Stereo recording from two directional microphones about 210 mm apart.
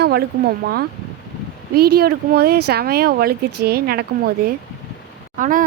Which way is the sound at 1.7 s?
50° right (ahead or behind).